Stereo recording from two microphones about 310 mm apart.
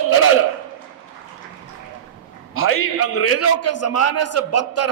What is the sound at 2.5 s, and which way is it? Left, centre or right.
A man's voice, left.